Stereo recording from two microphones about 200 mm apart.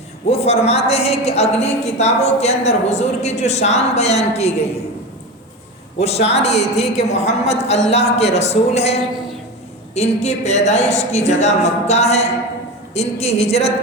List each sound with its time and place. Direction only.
0.3 s a woman's voice: 30° left (ahead or behind)
6.0 s a woman's voice: 30° left (ahead or behind)